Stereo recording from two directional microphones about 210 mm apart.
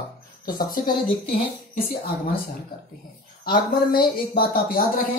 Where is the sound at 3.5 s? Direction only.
45° left (ahead or behind).